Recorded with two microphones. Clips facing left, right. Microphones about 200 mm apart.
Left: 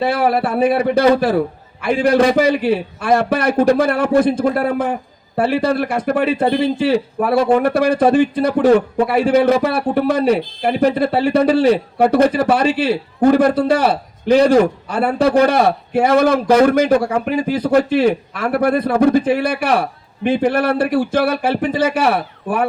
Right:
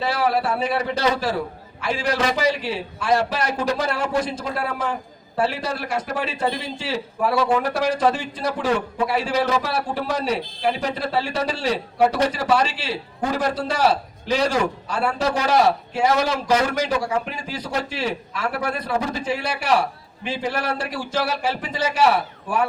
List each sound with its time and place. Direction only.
0.0 s a man's voice: 55° left (ahead or behind)